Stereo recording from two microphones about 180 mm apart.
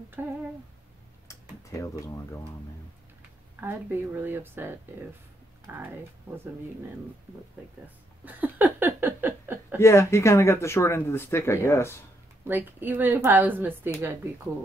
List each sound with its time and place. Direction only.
0.2 s speech: 10° right (ahead or behind)
1.2 s speech: 15° left (ahead or behind)
3.6 s speech: 10° right (ahead or behind)
8.3 s a sound: 10° right (ahead or behind)
9.8 s speech: 15° left (ahead or behind)
12.4 s speech: 10° right (ahead or behind)